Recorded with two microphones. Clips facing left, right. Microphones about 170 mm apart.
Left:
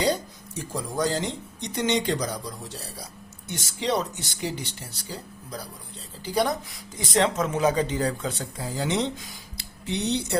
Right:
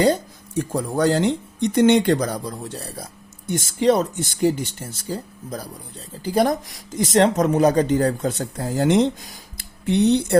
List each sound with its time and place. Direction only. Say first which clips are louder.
0.0 s speech: right 7 dB; 55° right (ahead or behind)